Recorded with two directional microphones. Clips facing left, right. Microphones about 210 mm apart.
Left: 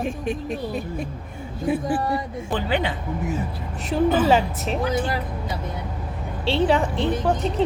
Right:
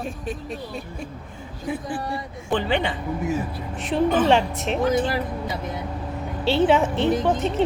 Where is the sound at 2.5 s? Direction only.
5° left (ahead or behind).